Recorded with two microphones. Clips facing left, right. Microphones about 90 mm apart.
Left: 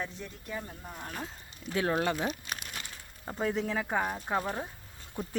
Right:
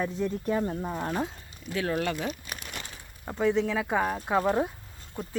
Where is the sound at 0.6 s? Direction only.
80° right.